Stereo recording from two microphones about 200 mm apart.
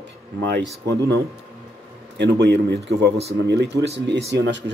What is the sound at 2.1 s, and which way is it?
Speech, 60° right (ahead or behind).